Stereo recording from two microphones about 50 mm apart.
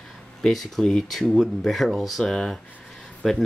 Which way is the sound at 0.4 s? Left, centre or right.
Centre.